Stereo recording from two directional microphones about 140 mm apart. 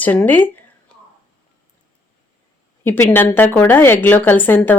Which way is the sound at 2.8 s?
15° left (ahead or behind).